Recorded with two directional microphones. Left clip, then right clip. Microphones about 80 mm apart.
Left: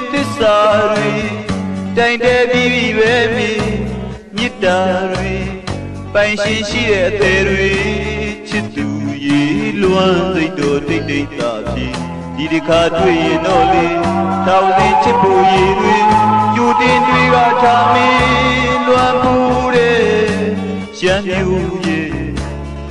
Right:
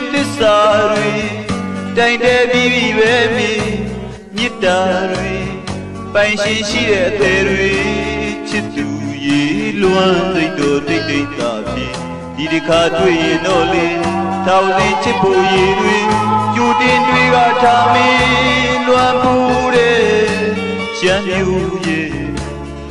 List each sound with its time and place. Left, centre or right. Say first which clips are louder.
0.1 s music: even; centre
2.0 s music: even; centre
6.1 s music: even; centre
9.2 s music: even; centre